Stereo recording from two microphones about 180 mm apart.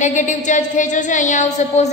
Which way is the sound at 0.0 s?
45° left (ahead or behind).